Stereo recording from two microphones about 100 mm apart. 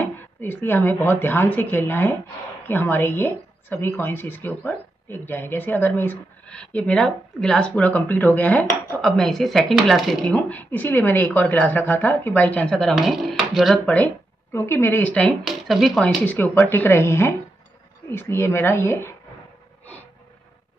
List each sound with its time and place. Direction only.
0.0 s speech: 20° left (ahead or behind)
6.4 s speech: 10° left (ahead or behind)
10.2 s speech: 15° left (ahead or behind)
14.5 s speech: 25° left (ahead or behind)
15.2 s speech: centre (ahead or behind)
16.3 s speech: 20° left (ahead or behind)